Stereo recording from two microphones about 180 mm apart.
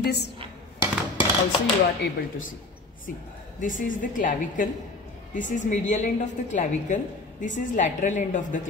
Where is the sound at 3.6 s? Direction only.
50° left (ahead or behind).